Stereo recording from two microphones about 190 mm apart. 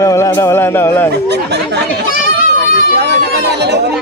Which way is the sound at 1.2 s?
60° right (ahead or behind).